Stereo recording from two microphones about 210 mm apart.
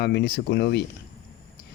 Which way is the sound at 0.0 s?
50° left (ahead or behind).